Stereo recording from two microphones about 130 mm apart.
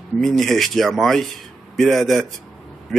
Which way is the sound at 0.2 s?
Centre (ahead or behind).